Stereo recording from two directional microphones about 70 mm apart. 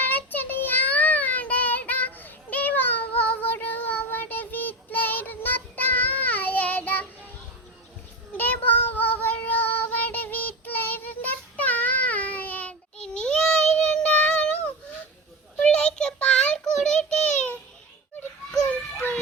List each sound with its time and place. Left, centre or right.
0.0 s child singing: left
8.4 s child singing: left
13.0 s child singing: centre
15.6 s child singing: centre
18.7 s a sound: left